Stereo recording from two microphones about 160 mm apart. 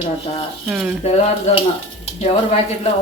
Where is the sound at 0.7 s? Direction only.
10° right (ahead or behind).